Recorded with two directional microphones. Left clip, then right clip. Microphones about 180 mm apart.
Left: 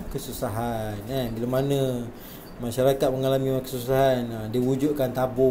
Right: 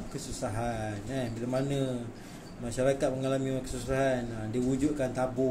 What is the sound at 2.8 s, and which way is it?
Speech, 20° left (ahead or behind).